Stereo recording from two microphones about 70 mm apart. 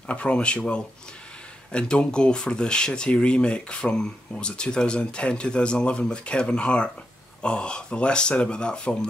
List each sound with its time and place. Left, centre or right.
0.0 s speech: centre